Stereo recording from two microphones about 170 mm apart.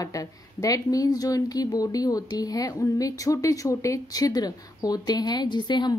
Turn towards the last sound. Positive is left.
turn(degrees=25)  # may be behind; listen again after turning